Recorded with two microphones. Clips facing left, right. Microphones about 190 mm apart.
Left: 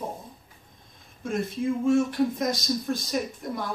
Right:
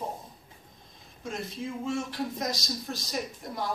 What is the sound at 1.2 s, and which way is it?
Speech, 55° left (ahead or behind).